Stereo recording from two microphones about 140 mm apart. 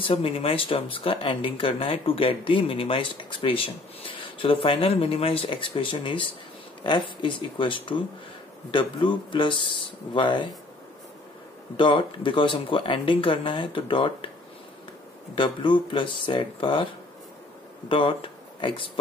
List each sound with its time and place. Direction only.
0.0 s speech: 40° left (ahead or behind)
11.7 s speech: 35° left (ahead or behind)
15.3 s speech: 35° left (ahead or behind)
17.8 s speech: 35° left (ahead or behind)